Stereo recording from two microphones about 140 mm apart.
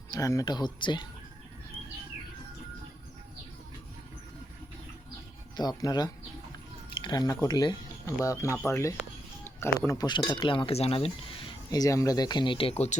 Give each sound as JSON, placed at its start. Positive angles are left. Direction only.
{"t": 0.1, "sound": "speech", "side_deg": 25}
{"t": 5.5, "sound": "speech", "side_deg": 30}